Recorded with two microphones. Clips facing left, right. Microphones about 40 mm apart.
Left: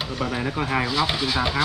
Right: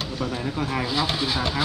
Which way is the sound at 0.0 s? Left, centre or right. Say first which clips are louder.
Left 2 dB; left.